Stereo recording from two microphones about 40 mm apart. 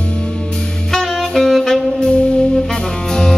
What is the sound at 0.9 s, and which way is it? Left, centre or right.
Saxophone, centre.